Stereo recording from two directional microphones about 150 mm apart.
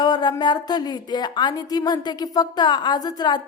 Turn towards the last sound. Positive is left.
turn(degrees=30)  # may be behind; listen again after turning